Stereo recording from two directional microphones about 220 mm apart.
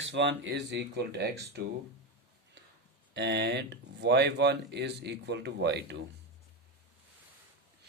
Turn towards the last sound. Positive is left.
turn(degrees=-50)  # may be behind; listen again after turning